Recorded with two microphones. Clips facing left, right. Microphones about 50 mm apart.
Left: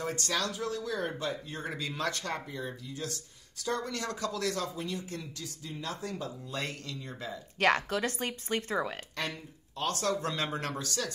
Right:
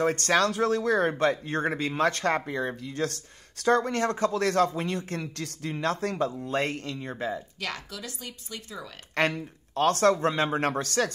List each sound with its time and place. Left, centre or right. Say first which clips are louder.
0.0 s speech: right 9 dB; right
1.7 s speech: right 7 dB; right
6.5 s speech: right 9 dB; right
7.6 s speech: left 14 dB; left
9.1 s speech: right 10 dB; right
10.1 s speech: right 7 dB; right
10.8 s speech: right 9 dB; right